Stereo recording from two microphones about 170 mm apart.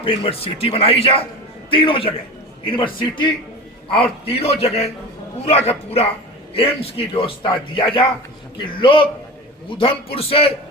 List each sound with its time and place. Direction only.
0.0 s a man's voice: 30° left (ahead or behind)